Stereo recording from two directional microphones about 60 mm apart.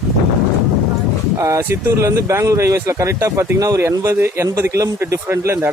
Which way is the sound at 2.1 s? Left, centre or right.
Right.